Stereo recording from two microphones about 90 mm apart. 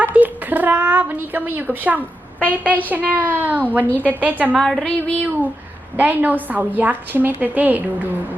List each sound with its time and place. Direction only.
0.0 s a woman's voice: 20° right (ahead or behind)
3.8 s a woman's voice: 20° left (ahead or behind)
4.1 s a woman's voice: 15° right (ahead or behind)
4.5 s a woman's voice: 5° left (ahead or behind)
6.0 s a woman's voice: 20° right (ahead or behind)